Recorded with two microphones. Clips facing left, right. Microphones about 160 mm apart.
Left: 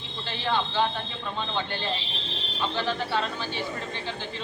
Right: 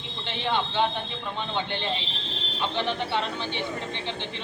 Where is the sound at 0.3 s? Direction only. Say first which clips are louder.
Even; 20° right (ahead or behind).